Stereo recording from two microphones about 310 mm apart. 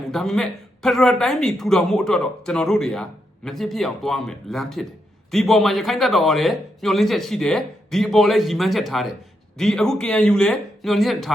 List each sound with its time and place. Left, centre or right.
0.1 s speech: centre